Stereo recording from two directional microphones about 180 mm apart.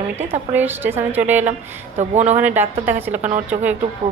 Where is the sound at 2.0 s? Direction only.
40° right (ahead or behind).